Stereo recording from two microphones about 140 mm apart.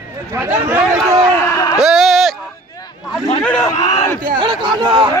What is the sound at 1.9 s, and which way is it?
Bleat, centre (ahead or behind).